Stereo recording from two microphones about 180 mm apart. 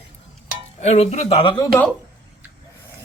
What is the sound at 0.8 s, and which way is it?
Speech, 35° left (ahead or behind).